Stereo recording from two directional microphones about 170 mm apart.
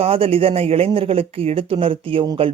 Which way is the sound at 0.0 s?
35° right (ahead or behind).